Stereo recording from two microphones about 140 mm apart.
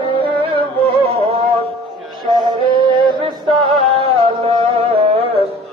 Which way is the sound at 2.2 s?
30° right (ahead or behind).